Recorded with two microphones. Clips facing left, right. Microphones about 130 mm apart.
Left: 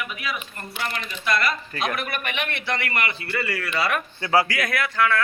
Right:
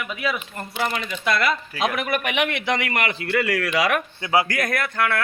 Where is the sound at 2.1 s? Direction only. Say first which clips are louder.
Right 6 dB; 90° right.